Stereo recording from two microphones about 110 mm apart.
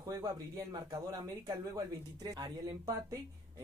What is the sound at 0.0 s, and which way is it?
Speech, 35° right (ahead or behind).